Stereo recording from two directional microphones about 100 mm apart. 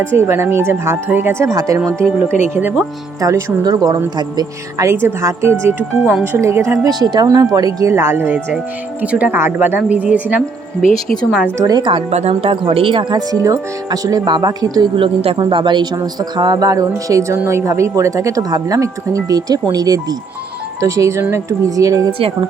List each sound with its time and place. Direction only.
0.0 s speech: 25° right (ahead or behind)
2.6 s speech: 20° right (ahead or behind)
3.2 s a woman's voice: 35° right (ahead or behind)
4.9 s a woman's voice: 25° right (ahead or behind)
11.5 s a woman's voice: 35° right (ahead or behind)
11.8 s speech: 60° right (ahead or behind)
13.3 s a woman's voice: 35° right (ahead or behind)
14.9 s speech: 70° right (ahead or behind)
15.4 s a woman's voice: 55° right (ahead or behind); by 22.1 s 35° right (ahead or behind)